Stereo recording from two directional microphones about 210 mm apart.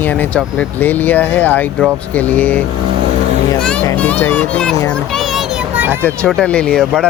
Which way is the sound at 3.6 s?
5° left (ahead or behind).